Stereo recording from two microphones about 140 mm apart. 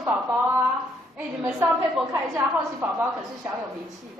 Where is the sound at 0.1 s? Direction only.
15° right (ahead or behind).